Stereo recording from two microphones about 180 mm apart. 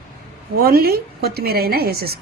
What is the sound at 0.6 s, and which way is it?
A woman's voice, 55° right (ahead or behind).